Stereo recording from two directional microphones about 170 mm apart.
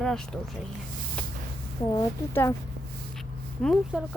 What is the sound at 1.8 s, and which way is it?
Speech, 20° left (ahead or behind).